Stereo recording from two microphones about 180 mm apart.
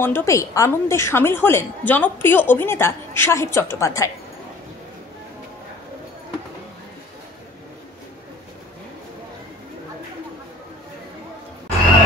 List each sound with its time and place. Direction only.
0.0 s a woman's voice: 15° left (ahead or behind)